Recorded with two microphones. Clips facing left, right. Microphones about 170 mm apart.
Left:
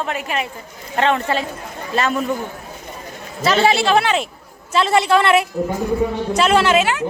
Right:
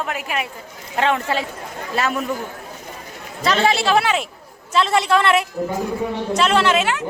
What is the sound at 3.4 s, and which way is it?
A man's voice, 5° left (ahead or behind).